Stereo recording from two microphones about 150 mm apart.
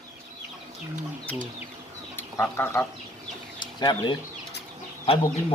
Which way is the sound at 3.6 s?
30° left (ahead or behind).